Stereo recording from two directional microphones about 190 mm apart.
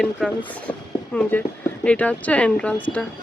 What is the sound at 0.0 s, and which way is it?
Speech, 5° left (ahead or behind).